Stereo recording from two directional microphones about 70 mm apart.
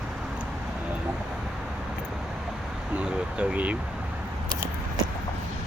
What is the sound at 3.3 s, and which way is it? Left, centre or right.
Speech, centre.